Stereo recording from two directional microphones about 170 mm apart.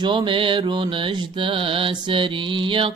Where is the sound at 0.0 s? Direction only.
30° right (ahead or behind).